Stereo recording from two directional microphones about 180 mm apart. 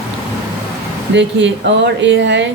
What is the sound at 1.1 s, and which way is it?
Speech, 75° right (ahead or behind).